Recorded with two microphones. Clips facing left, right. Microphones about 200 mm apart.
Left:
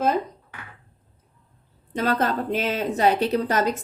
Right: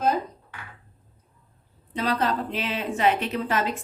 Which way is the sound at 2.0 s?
45° left (ahead or behind).